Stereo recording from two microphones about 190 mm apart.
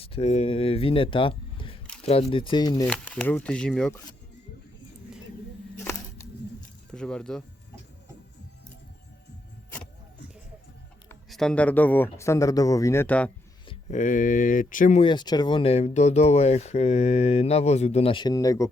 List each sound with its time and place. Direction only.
0.0 s speech: 30° left (ahead or behind)
2.8 s speech: 5° left (ahead or behind)
6.9 s speech: 5° left (ahead or behind)
11.3 s speech: centre (ahead or behind)
13.9 s speech: 45° left (ahead or behind)
15.0 s speech: 25° left (ahead or behind)